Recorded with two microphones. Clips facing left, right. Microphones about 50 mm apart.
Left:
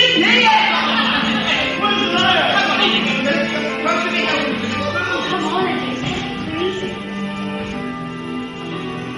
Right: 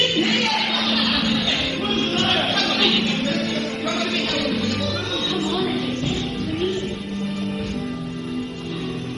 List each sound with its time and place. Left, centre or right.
0.0 s music: left